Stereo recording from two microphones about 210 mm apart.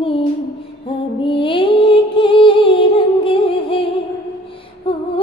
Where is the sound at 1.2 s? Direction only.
25° left (ahead or behind).